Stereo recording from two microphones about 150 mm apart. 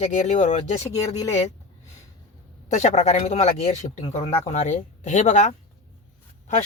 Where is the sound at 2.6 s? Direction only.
50° left (ahead or behind).